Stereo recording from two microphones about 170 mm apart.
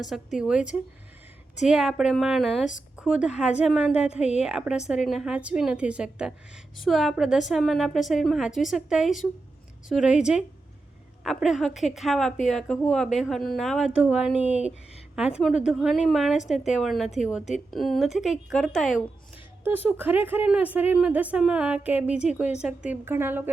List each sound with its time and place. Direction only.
0.0 s a woman's voice: 5° right (ahead or behind)
19.8 s speech: 10° right (ahead or behind)